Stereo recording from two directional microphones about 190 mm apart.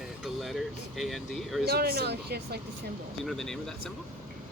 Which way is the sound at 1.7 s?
55° right (ahead or behind).